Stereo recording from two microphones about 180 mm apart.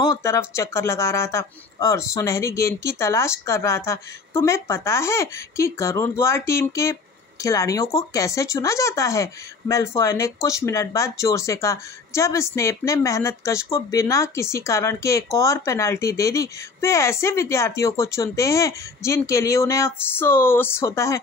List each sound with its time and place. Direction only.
0.1 s speech: 15° left (ahead or behind)